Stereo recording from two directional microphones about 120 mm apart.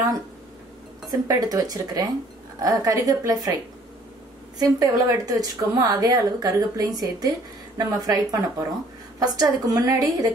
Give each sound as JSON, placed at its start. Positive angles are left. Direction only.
{"t": 1.2, "sound": "a woman's voice", "side_deg": -30}
{"t": 4.6, "sound": "a woman's voice", "side_deg": -30}